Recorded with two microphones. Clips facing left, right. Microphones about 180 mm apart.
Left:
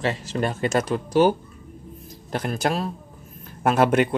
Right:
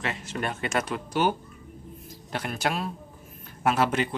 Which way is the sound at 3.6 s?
50° left (ahead or behind).